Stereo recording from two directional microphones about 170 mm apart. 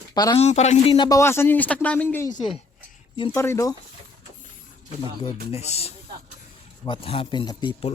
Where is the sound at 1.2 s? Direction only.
15° left (ahead or behind).